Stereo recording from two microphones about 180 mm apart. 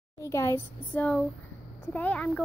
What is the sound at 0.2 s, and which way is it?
Speech, 15° left (ahead or behind).